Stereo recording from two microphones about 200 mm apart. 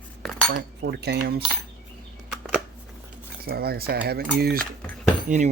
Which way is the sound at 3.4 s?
50° right (ahead or behind).